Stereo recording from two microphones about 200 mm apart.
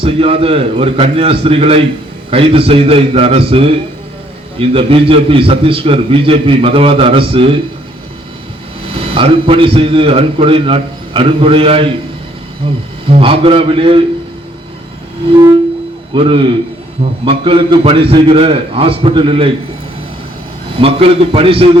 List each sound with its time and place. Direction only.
0.0 s a man's voice: 30° right (ahead or behind)
8.9 s a man's voice: 30° right (ahead or behind)
16.1 s a man's voice: 25° right (ahead or behind)
20.7 s a man's voice: 30° right (ahead or behind)